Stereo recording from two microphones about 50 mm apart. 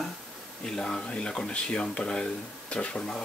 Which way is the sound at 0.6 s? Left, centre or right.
Centre.